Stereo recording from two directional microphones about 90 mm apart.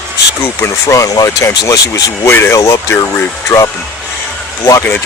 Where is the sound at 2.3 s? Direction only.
25° left (ahead or behind).